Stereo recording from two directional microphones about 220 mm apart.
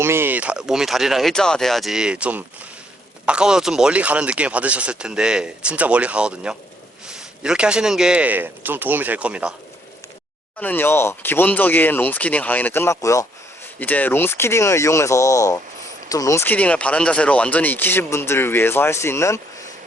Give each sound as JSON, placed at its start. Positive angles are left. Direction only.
{"t": 0.0, "sound": "speech", "side_deg": -10}
{"t": 10.6, "sound": "speech", "side_deg": 10}